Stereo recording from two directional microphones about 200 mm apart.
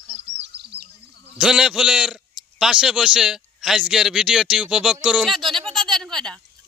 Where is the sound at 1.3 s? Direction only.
5° right (ahead or behind).